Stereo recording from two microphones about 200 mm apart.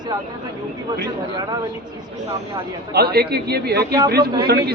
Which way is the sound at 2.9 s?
55° right (ahead or behind).